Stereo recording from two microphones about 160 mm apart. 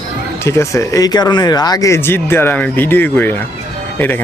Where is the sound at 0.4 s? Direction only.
20° left (ahead or behind).